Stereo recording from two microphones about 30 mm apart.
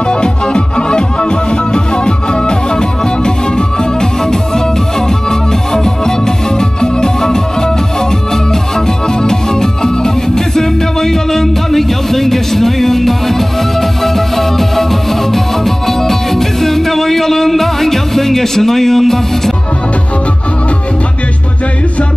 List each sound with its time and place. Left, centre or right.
0.1 s music: left
8.7 s music: centre